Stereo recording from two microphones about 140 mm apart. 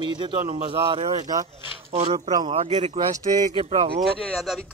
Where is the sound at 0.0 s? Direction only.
35° right (ahead or behind).